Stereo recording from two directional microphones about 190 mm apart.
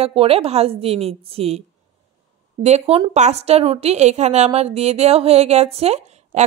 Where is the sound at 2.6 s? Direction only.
35° right (ahead or behind).